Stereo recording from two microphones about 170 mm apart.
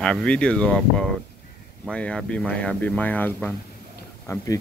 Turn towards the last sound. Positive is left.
turn(degrees=15)  # may be behind; listen again after turning